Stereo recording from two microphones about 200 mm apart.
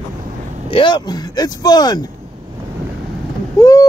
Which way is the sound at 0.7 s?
25° left (ahead or behind).